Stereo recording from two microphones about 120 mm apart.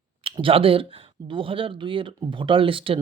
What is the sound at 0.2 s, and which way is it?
Speech, 50° right (ahead or behind).